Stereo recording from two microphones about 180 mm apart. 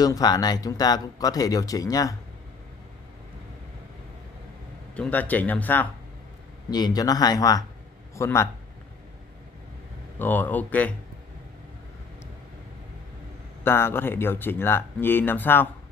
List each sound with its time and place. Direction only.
0.0 s speech: 20° left (ahead or behind)
4.9 s speech: 10° left (ahead or behind)
6.7 s a man's voice: 20° left (ahead or behind)
10.1 s speech: 10° left (ahead or behind)
13.7 s speech: 15° left (ahead or behind)